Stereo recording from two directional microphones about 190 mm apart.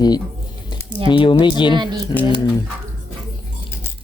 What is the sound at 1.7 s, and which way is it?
Speech, 25° right (ahead or behind).